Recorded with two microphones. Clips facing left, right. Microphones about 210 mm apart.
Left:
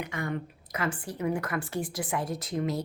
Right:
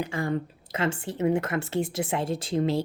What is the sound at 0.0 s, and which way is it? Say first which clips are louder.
A woman's voice: right 5 dB; 30° right (ahead or behind).